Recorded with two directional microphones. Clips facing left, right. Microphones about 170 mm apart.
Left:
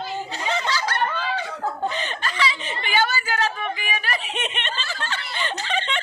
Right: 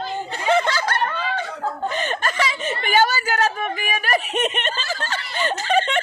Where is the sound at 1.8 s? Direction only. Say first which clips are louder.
Right 3 dB; 50° right (ahead or behind).